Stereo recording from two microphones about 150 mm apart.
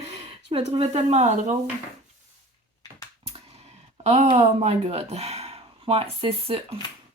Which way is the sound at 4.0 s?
45° right (ahead or behind).